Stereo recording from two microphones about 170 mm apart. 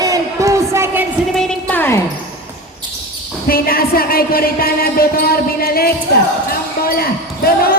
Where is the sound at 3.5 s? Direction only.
60° left (ahead or behind).